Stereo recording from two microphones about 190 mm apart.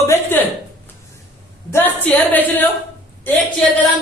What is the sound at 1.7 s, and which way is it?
Speech, 10° left (ahead or behind).